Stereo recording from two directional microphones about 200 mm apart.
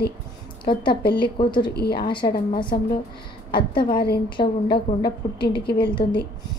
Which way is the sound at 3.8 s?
50° left (ahead or behind).